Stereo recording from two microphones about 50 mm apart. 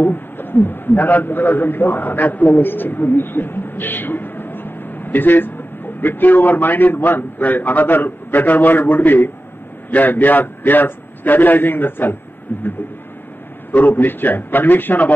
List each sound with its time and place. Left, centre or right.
0.0 s a man's voice: left
13.7 s a man's voice: left